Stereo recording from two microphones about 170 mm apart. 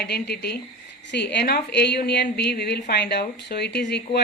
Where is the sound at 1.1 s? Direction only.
80° left.